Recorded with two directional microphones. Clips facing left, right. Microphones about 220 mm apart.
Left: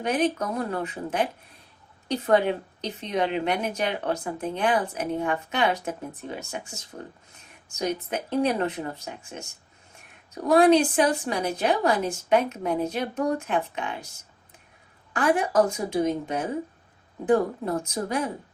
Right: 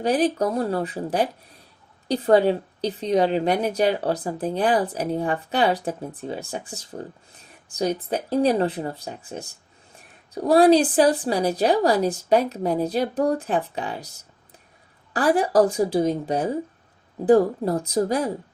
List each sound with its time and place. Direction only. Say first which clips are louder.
0.0 s a woman's voice: right 4 dB; 35° right (ahead or behind)
15.1 s a woman's voice: right 3 dB; 35° right (ahead or behind)